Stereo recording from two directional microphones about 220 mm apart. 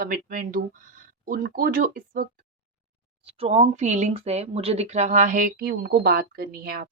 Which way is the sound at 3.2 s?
30° right (ahead or behind).